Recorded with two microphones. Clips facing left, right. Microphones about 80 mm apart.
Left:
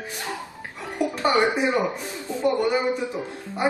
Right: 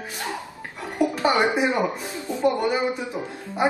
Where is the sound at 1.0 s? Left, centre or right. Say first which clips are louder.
Right 1 dB; centre.